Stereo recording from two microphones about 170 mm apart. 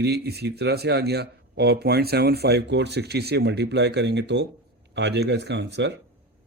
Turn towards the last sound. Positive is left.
turn(degrees=-90)